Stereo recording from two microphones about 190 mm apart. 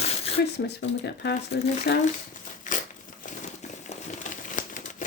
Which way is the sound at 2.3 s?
45° left (ahead or behind).